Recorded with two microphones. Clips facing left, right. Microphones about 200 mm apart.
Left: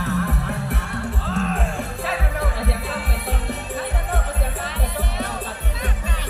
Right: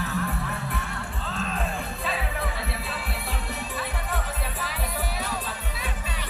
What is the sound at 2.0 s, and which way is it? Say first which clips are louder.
Music: left 4 dB; 65° left (ahead or behind).